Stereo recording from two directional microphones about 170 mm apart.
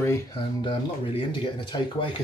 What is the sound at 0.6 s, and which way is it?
Speech, 30° left (ahead or behind).